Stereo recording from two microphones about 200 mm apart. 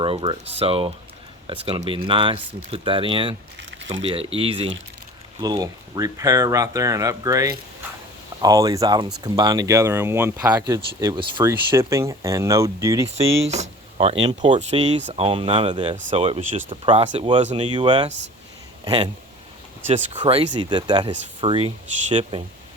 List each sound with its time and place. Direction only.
0.0 s speech: 25° right (ahead or behind)
11.0 s speech: 25° right (ahead or behind)
13.1 s speech: 30° right (ahead or behind)